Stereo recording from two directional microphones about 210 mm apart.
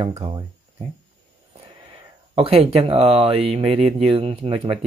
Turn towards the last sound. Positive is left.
turn(degrees=-25)  # may be behind; listen again after turning